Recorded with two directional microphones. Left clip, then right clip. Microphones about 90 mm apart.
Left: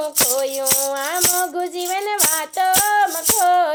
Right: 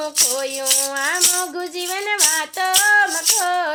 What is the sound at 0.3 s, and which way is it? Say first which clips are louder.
Music: left 1 dB; 40° left (ahead or behind).